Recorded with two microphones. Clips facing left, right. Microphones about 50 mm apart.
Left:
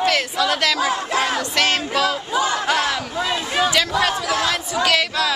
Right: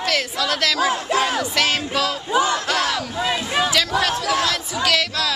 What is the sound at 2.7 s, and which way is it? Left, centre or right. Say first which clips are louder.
Speech: left 1 dB; centre.